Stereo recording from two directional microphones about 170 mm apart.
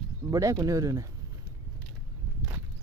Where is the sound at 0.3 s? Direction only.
20° right (ahead or behind).